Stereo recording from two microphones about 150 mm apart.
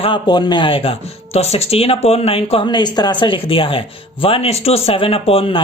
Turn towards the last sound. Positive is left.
turn(degrees=40)  # may be behind; listen again after turning